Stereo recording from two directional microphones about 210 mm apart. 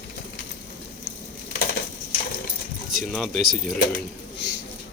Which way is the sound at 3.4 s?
40° right (ahead or behind).